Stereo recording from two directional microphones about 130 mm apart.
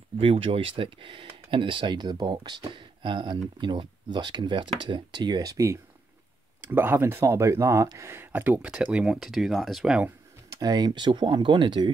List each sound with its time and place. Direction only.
0.2 s speech: 45° right (ahead or behind); by 10.1 s 5° right (ahead or behind)
10.5 s speech: 30° right (ahead or behind)